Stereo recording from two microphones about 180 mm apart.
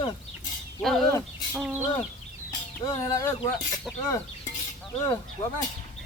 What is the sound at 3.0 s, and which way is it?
Speech, 20° left (ahead or behind).